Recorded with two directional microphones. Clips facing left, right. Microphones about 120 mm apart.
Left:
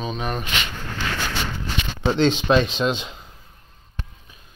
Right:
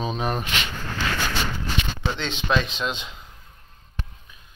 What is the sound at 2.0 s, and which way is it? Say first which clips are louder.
Speech: left 9 dB; 35° left (ahead or behind).